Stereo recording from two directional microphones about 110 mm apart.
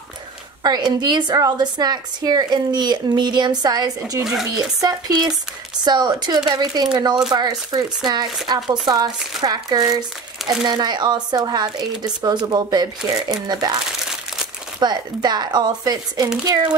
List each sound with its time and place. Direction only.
0.7 s a woman's voice: 40° right (ahead or behind)
4.2 s speech: centre (ahead or behind)
4.6 s a woman's voice: 35° right (ahead or behind)
14.8 s a woman's voice: 40° right (ahead or behind)